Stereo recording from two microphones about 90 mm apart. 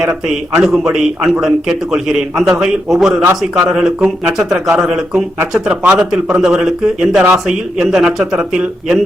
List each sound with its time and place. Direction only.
0.0 s a man's voice: 5° right (ahead or behind)